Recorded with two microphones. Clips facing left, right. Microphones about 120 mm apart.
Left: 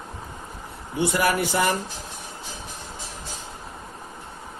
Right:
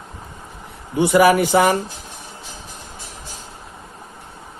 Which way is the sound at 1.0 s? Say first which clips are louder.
Right 9 dB; 90° right.